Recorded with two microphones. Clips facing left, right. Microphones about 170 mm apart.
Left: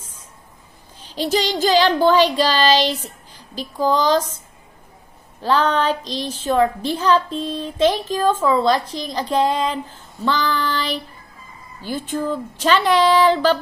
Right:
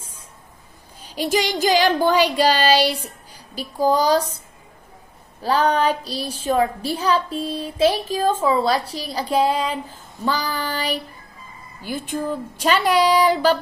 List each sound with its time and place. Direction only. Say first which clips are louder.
1.1 s a woman's voice: left 1 dB; 15° right (ahead or behind)
4.0 s speech: even; 40° right (ahead or behind)
5.4 s a woman's voice: even; 10° right (ahead or behind)
11.8 s a woman's voice: left 2 dB; 15° right (ahead or behind)